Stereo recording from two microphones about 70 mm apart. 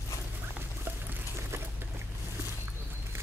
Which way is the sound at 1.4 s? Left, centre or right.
Right.